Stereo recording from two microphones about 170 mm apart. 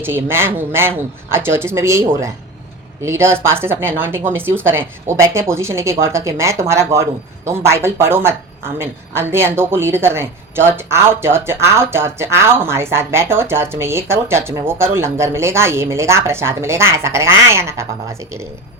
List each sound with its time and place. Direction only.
0.0 s speech: 15° right (ahead or behind)